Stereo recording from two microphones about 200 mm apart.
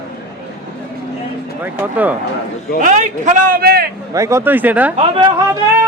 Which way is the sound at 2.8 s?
40° right (ahead or behind).